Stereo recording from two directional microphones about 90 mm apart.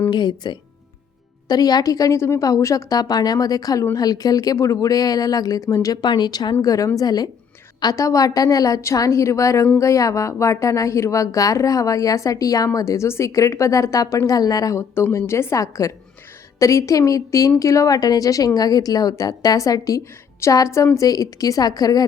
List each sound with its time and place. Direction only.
0.1 s speech: 55° left (ahead or behind)
1.5 s a woman's voice: 45° left (ahead or behind)
6.0 s a woman's voice: 50° left (ahead or behind)